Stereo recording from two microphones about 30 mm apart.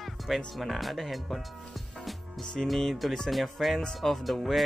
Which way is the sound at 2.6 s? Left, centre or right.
Centre.